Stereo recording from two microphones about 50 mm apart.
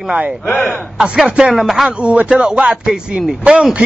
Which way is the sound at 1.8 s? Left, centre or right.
Right.